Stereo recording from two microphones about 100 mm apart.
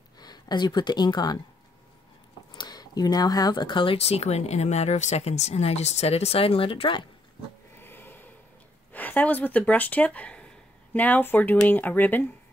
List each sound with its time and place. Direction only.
0.2 s speech: 45° left (ahead or behind)
2.5 s speech: 45° left (ahead or behind); by 7.1 s 60° left (ahead or behind)
7.8 s snort: 20° left (ahead or behind)
8.9 s speech: 15° left (ahead or behind)